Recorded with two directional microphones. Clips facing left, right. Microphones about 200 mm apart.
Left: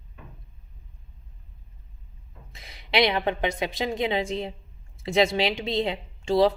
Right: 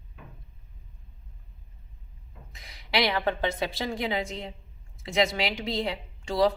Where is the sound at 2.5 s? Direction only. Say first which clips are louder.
Left 3 dB; 25° left (ahead or behind).